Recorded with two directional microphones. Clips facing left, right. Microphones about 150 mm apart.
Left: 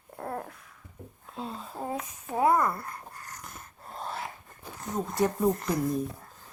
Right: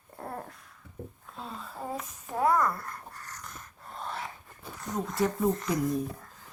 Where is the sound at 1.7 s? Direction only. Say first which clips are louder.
Left 2 dB; 5° left (ahead or behind).